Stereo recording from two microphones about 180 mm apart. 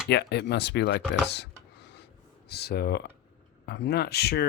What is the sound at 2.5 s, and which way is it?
Speech, 65° left (ahead or behind).